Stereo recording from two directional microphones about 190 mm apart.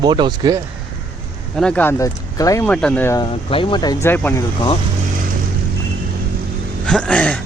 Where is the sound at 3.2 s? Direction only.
30° left (ahead or behind); by 4.4 s 10° left (ahead or behind).